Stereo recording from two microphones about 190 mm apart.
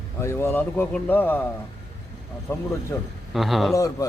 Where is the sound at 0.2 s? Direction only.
15° left (ahead or behind).